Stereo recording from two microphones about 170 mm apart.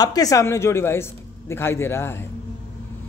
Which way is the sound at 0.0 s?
20° left (ahead or behind).